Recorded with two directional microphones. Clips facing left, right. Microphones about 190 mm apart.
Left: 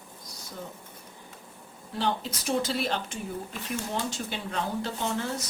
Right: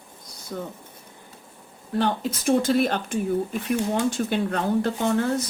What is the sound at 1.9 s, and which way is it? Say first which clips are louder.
Speech: right 6 dB; 50° right (ahead or behind).